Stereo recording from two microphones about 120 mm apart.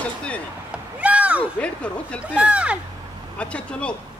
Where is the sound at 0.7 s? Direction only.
10° right (ahead or behind).